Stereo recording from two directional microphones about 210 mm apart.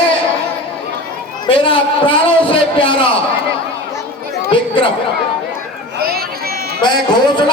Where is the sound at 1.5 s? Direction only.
25° left (ahead or behind).